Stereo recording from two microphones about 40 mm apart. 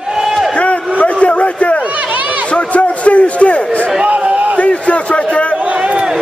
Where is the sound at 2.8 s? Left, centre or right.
Left.